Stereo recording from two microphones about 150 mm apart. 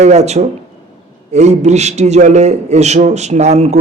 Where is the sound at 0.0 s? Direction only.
45° right (ahead or behind).